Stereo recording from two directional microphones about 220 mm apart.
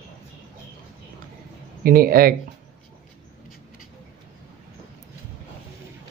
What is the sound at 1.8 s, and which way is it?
Speech, 40° right (ahead or behind).